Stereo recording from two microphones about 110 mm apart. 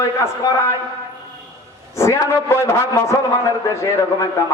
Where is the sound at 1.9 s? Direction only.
25° left (ahead or behind).